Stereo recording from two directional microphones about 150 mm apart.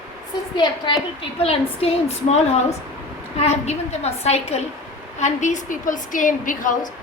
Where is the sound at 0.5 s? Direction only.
30° left (ahead or behind).